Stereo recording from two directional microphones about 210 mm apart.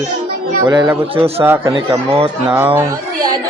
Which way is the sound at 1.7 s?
25° right (ahead or behind).